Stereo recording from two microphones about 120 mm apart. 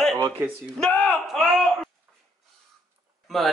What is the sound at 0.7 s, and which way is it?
Speech, 10° left (ahead or behind).